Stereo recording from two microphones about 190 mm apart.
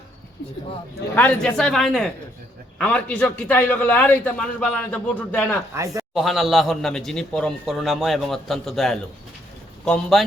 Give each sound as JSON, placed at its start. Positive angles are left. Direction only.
{"t": 1.1, "sound": "a man's voice", "side_deg": 5}
{"t": 5.7, "sound": "speech", "side_deg": -15}
{"t": 6.1, "sound": "a man's voice", "side_deg": 0}